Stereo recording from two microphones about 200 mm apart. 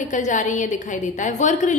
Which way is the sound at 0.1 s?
40° left (ahead or behind).